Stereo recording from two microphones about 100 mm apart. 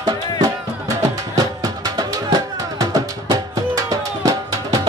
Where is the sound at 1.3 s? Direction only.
40° right (ahead or behind).